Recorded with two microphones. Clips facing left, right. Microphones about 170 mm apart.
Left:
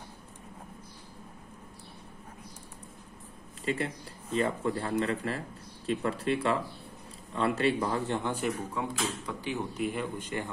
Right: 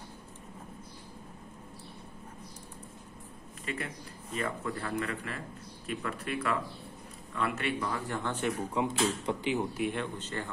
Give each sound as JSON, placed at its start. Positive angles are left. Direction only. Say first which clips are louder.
{"t": 3.6, "sound": "a man's voice", "louder": "left 6 dB", "side_deg": 30}
{"t": 8.4, "sound": "speech", "louder": "right 2 dB", "side_deg": 0}
{"t": 9.0, "sound": "speech", "louder": "right 4 dB", "side_deg": -25}
{"t": 9.8, "sound": "speech", "louder": "even", "side_deg": 0}
{"t": 10.1, "sound": "speech", "louder": "left 3 dB", "side_deg": 15}